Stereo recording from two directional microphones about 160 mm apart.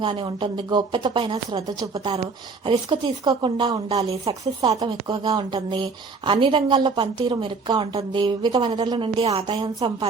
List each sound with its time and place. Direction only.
0.0 s a woman's voice: 30° right (ahead or behind)
4.3 s speech: 35° right (ahead or behind)
4.8 s a woman's voice: 25° right (ahead or behind)